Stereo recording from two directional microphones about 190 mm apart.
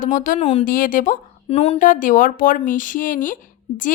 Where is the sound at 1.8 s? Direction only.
45° left (ahead or behind).